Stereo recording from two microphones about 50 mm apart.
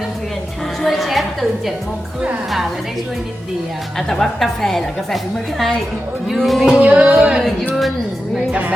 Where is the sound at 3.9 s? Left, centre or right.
Centre.